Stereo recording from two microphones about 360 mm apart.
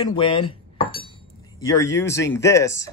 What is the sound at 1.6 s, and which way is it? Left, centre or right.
A man's voice, centre.